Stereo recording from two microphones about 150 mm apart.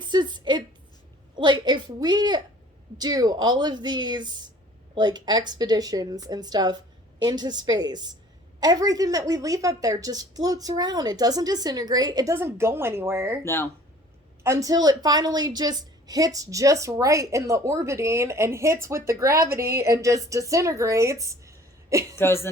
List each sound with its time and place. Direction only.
0.0 s a sound: 30° right (ahead or behind)
1.4 s a woman's voice: 30° right (ahead or behind)
13.4 s speech: 15° left (ahead or behind)
14.4 s a woman's voice: 20° right (ahead or behind)
22.2 s speech: 15° left (ahead or behind)